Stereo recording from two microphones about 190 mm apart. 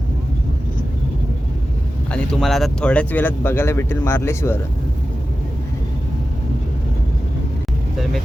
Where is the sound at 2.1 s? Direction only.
5° left (ahead or behind).